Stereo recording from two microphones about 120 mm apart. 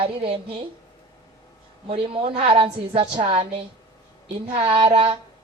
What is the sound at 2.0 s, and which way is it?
A woman's voice, 50° right (ahead or behind).